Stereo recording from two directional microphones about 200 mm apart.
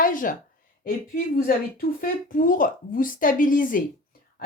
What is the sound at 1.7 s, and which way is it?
A woman's voice, 45° left (ahead or behind).